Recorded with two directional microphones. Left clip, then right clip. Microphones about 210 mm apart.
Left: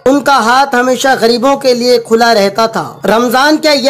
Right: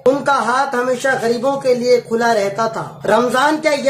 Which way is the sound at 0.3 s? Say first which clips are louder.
Left 7 dB; 40° left (ahead or behind).